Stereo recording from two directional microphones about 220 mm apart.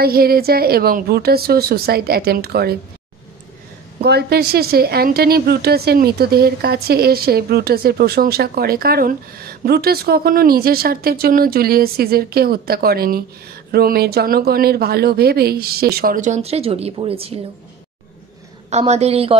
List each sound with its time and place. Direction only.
0.0 s a woman's voice: 45° right (ahead or behind)
4.0 s a woman's voice: 45° right (ahead or behind); by 17.4 s 25° right (ahead or behind)
18.7 s speech: 30° right (ahead or behind)